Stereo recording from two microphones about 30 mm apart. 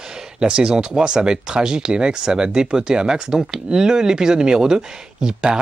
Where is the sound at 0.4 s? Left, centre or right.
Right.